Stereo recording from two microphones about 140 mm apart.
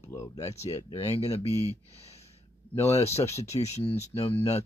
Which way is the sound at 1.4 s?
20° right (ahead or behind).